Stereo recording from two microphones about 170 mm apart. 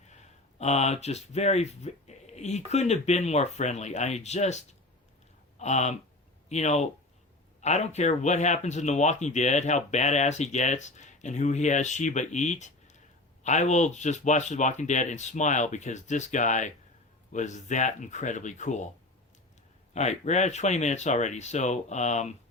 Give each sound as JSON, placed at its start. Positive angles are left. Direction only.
{"t": 0.1, "sound": "speech", "side_deg": 40}
{"t": 19.9, "sound": "speech", "side_deg": 40}